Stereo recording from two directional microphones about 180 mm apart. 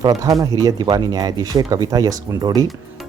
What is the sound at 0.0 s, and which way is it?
Speech, 20° right (ahead or behind).